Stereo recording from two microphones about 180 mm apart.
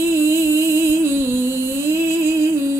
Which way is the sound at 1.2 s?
15° right (ahead or behind).